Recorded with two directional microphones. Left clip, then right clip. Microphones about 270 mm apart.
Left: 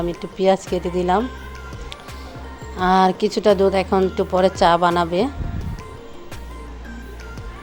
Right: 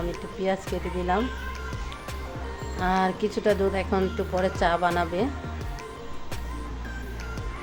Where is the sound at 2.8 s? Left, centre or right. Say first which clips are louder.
Left 9 dB; left.